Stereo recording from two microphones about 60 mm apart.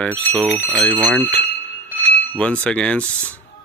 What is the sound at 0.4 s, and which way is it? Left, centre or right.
Speech, right.